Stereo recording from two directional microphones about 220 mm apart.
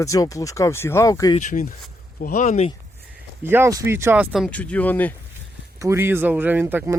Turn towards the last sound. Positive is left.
turn(degrees=-10)  # may be behind; listen again after turning